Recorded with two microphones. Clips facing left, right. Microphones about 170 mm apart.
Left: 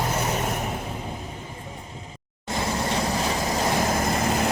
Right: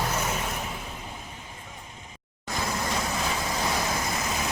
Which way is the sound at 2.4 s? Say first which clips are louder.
Left 4 dB; 25° left (ahead or behind).